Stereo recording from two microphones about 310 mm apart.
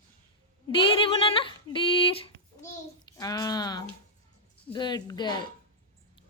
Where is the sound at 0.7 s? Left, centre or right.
Centre.